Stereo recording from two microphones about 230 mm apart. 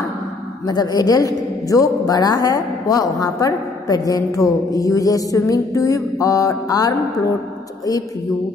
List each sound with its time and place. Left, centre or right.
0.7 s a man's voice: centre